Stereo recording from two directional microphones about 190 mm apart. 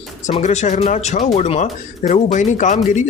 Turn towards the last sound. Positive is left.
turn(degrees=40)  # may be behind; listen again after turning